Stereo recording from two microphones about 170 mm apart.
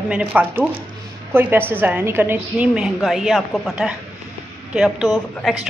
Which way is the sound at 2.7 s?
Centre (ahead or behind).